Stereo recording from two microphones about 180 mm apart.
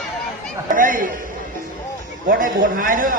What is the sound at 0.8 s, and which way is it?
Speech, 50° right (ahead or behind).